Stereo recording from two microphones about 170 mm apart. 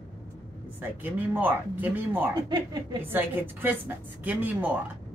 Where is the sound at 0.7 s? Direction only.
10° right (ahead or behind).